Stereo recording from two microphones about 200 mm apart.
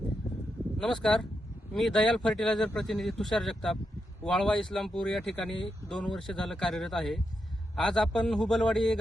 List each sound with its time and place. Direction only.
0.8 s speech: 5° left (ahead or behind)